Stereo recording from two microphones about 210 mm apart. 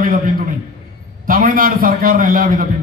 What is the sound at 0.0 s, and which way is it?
A man's voice, 40° right (ahead or behind).